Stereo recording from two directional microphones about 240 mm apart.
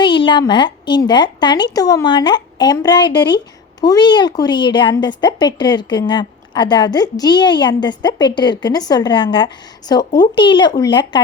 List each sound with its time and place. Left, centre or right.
0.0 s a woman's voice: centre